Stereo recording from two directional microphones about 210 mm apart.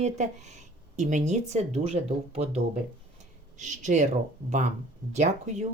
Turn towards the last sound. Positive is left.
turn(degrees=-35)  # may be behind; listen again after turning